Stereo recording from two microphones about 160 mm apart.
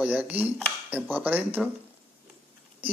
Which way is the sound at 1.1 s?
10° right (ahead or behind).